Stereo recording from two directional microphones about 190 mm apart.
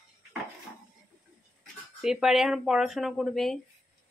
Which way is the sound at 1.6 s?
5° right (ahead or behind).